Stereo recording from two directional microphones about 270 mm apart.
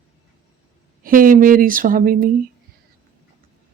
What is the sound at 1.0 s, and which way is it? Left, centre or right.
Speech, right.